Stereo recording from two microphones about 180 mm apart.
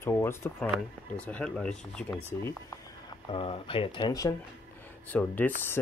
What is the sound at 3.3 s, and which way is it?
Speech, 30° left (ahead or behind).